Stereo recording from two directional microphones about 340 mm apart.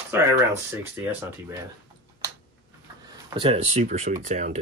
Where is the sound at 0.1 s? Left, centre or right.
Centre.